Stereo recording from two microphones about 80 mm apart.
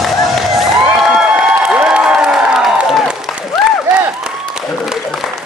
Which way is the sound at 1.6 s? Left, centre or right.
Centre.